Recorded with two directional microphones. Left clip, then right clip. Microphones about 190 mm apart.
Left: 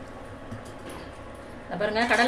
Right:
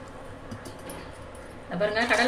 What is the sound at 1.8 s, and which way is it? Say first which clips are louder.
Speech: left 1 dB; 15° left (ahead or behind).